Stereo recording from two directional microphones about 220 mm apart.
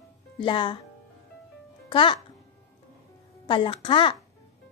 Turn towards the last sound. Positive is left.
turn(degrees=20)  # may be behind; listen again after turning